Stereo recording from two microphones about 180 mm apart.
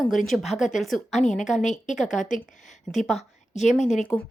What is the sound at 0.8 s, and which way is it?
Speech, centre (ahead or behind).